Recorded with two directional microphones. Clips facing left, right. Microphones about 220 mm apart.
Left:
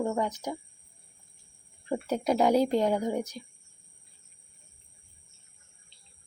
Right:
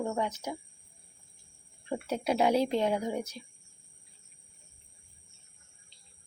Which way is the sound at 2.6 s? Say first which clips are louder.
Left 3 dB; 40° left (ahead or behind).